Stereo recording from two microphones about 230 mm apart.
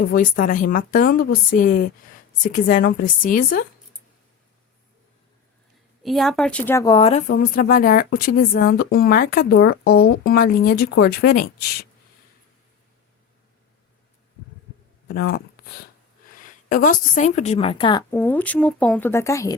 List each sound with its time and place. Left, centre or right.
0.1 s speech: left
6.0 s a woman's voice: centre; by 7.3 s left
7.3 s speech: left
15.0 s a woman's voice: left; by 19.5 s centre